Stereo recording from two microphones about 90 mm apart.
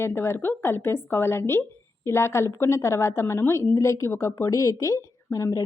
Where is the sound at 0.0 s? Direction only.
30° left (ahead or behind).